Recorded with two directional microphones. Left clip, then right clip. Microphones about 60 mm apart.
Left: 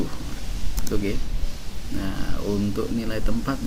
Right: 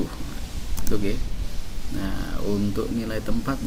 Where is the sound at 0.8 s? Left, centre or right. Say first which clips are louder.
Even; centre.